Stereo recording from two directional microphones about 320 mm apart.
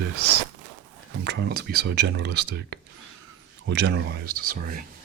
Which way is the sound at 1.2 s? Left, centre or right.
Right.